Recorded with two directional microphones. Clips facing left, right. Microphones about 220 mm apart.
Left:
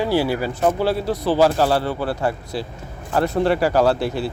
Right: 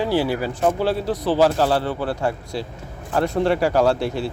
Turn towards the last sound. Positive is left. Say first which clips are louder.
# left 1 dB
turn(degrees=5)  # may be behind; listen again after turning